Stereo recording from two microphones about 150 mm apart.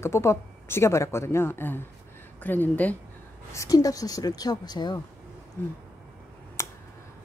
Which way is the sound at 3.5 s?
20° left (ahead or behind).